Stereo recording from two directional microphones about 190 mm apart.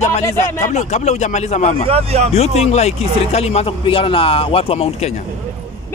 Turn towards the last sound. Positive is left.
turn(degrees=30)  # may be behind; listen again after turning